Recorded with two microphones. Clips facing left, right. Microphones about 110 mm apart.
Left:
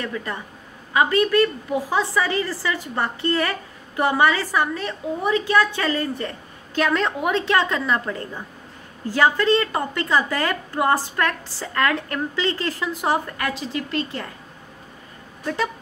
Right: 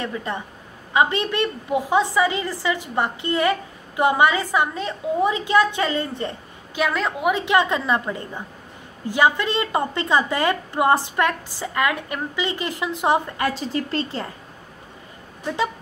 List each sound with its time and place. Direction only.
0.0 s a woman's voice: 25° right (ahead or behind)
6.7 s a woman's voice: 5° right (ahead or behind); by 13.5 s 20° right (ahead or behind)
13.5 s a woman's voice: 35° right (ahead or behind)
15.4 s speech: 15° right (ahead or behind)